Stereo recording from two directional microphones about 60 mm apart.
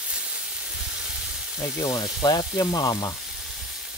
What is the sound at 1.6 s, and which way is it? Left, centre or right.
Frying, left.